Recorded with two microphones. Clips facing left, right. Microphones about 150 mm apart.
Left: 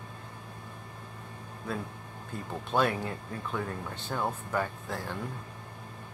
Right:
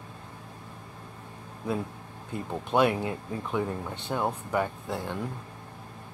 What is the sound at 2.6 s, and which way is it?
Speech, 15° right (ahead or behind).